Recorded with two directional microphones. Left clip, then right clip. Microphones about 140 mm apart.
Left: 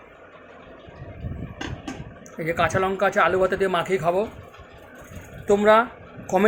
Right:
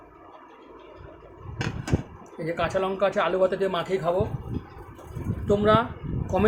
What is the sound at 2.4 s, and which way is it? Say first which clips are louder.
Speech: left 4 dB; 40° left (ahead or behind).